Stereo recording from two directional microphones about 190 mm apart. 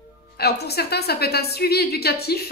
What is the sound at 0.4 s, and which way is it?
Speech, 60° left (ahead or behind).